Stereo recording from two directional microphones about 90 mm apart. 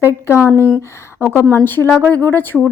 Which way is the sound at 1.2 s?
25° left (ahead or behind).